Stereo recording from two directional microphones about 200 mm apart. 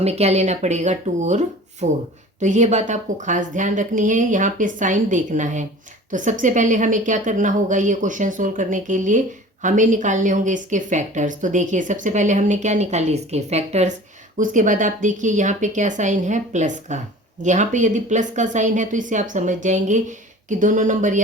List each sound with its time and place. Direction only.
0.0 s a woman's voice: 30° right (ahead or behind)